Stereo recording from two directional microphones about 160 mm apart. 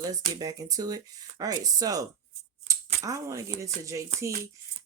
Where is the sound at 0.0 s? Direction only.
25° right (ahead or behind).